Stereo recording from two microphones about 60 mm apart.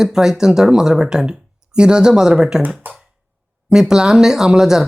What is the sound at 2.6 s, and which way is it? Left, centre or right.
Speech, right.